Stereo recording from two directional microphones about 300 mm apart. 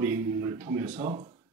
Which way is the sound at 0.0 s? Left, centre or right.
Centre.